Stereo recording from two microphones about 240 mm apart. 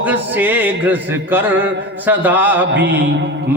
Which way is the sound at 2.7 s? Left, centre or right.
Right.